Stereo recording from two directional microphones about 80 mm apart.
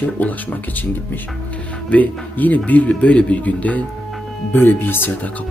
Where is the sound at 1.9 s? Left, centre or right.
Left.